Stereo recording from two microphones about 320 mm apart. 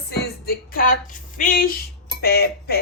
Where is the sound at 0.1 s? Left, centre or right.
Left.